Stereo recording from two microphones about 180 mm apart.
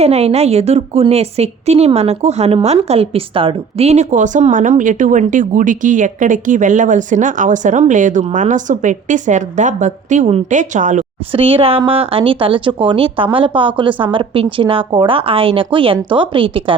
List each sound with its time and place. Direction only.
0.0 s a woman's voice: 35° right (ahead or behind)
11.3 s a woman's voice: 30° right (ahead or behind)